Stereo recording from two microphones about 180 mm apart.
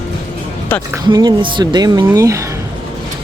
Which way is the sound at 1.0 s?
20° right (ahead or behind).